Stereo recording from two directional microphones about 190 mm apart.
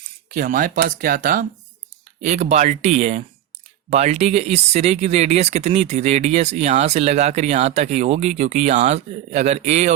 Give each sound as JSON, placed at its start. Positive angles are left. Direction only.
{"t": 0.3, "sound": "speech", "side_deg": -45}